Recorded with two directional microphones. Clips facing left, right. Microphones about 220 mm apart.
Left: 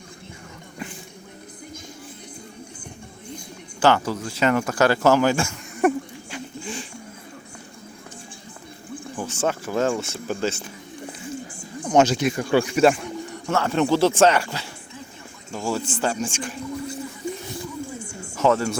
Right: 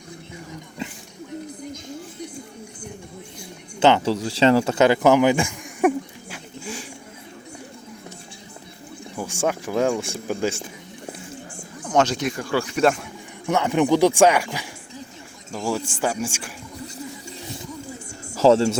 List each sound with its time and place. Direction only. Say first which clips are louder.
0.8 s a sound: right 2 dB; 25° right (ahead or behind)
3.8 s speech: right 2 dB; 20° right (ahead or behind)
6.3 s a sound: left 2 dB; 10° right (ahead or behind)
9.1 s speech: right 1 dB; 10° right (ahead or behind)
11.9 s speech: left 3 dB; 10° left (ahead or behind)
12.4 s speech: left 3 dB; 20° left (ahead or behind); by 13.1 s centre (ahead or behind)
13.5 s speech: right 2 dB; 15° right (ahead or behind)
15.9 s speech: even; 10° right (ahead or behind)
18.3 s speech: right 5 dB; 30° right (ahead or behind)